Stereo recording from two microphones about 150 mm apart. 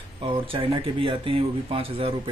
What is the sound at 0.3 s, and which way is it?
Speech, 35° right (ahead or behind).